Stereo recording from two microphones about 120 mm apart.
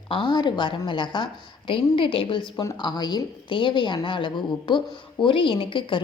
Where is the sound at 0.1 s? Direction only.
45° left (ahead or behind).